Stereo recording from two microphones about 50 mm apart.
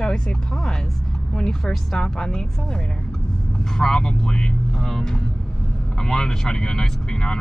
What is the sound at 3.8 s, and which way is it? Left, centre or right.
Speech, centre.